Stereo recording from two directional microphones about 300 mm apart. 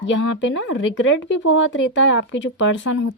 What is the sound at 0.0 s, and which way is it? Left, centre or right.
Speech, left.